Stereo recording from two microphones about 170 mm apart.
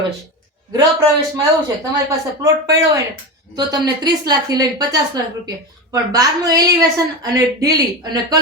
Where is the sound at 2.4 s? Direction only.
20° right (ahead or behind).